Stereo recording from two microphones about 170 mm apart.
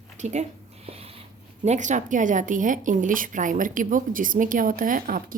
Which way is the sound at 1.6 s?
45° right (ahead or behind).